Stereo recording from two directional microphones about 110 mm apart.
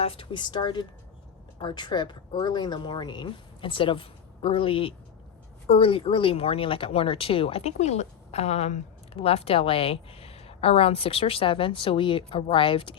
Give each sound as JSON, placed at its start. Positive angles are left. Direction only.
{"t": 0.0, "sound": "a woman's voice", "side_deg": 55}
{"t": 9.1, "sound": "a woman's voice", "side_deg": 60}